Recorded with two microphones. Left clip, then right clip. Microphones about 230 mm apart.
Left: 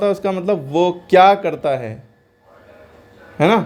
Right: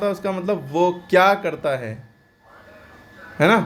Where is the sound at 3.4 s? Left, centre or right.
Centre.